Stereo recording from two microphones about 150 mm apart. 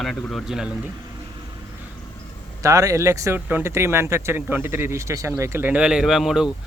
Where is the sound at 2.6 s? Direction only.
20° right (ahead or behind).